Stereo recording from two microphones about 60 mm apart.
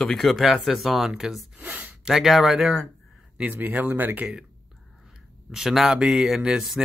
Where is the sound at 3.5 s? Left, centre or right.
Right.